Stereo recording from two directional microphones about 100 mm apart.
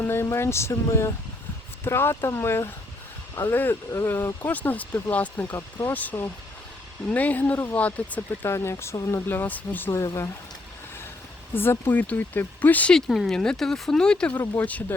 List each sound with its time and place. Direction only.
0.0 s speech: 25° left (ahead or behind)
8.4 s speech: 30° left (ahead or behind)
9.9 s speech: 30° left (ahead or behind)
11.5 s speech: 20° left (ahead or behind)